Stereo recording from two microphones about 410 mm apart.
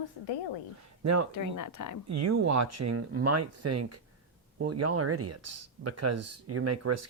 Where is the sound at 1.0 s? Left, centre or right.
Right.